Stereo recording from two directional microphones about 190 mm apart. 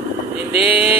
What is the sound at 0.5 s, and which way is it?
Speech, 30° left (ahead or behind).